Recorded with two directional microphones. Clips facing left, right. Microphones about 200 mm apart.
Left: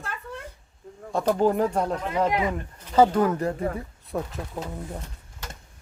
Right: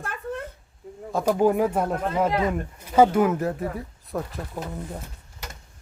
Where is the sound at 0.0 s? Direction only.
55° right (ahead or behind).